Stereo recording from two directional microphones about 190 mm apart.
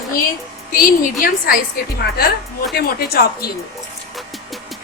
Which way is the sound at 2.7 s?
55° left (ahead or behind).